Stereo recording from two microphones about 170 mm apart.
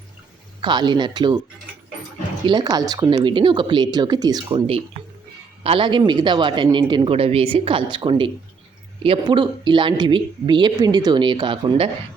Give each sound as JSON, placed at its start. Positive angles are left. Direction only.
{"t": 0.6, "sound": "speech", "side_deg": -25}
{"t": 2.5, "sound": "speech", "side_deg": -25}
{"t": 5.6, "sound": "speech", "side_deg": -30}